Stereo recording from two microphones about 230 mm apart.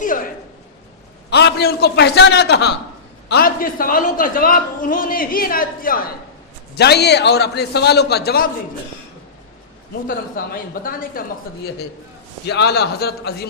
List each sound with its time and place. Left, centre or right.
0.0 s a sound: left
1.3 s a man's voice: left
10.1 s a man's voice: left
12.5 s a man's voice: left